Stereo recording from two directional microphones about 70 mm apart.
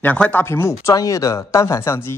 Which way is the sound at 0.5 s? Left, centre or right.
Left.